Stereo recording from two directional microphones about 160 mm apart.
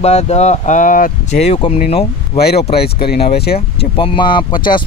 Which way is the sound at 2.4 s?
85° left.